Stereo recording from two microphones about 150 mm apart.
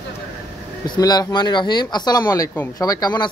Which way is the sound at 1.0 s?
25° left (ahead or behind).